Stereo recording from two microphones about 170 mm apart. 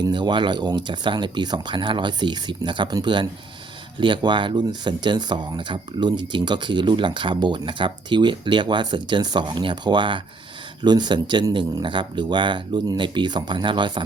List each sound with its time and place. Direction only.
0.1 s speech: 25° right (ahead or behind)